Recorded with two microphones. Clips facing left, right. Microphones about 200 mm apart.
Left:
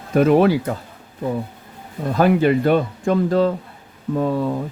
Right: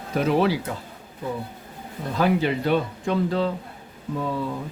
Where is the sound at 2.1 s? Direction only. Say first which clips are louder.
Left 6 dB; 50° left (ahead or behind).